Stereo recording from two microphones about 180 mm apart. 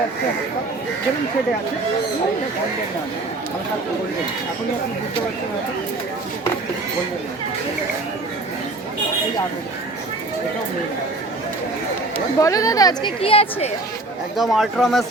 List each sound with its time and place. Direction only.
12.1 s speech: 20° left (ahead or behind)
14.3 s speech: centre (ahead or behind)